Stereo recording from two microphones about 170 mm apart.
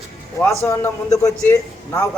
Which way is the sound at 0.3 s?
10° left (ahead or behind).